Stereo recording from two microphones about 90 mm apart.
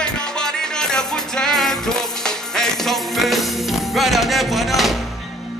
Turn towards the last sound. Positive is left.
turn(degrees=0)  # may be behind; listen again after turning